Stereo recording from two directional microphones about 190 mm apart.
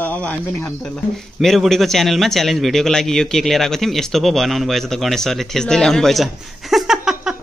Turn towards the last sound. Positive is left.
turn(degrees=0)  # may be behind; listen again after turning